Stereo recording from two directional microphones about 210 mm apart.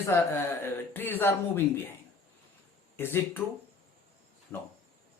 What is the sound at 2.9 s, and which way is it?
Speech, 10° left (ahead or behind).